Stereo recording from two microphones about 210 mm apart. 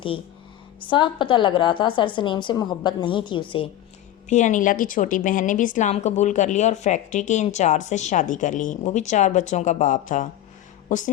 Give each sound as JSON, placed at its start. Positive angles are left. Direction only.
{"t": 0.9, "sound": "a woman's voice", "side_deg": 20}
{"t": 4.3, "sound": "a woman's voice", "side_deg": 35}